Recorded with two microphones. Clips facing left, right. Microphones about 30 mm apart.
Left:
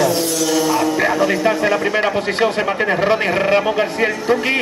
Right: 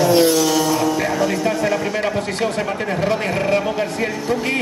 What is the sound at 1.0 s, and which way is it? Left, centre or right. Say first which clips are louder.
Speech: left 3 dB; centre.